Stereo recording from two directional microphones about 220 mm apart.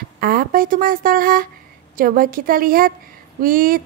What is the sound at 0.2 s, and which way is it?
Speech, 40° right (ahead or behind).